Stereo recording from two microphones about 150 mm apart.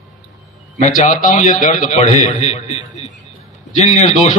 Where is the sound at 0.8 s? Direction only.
55° left (ahead or behind).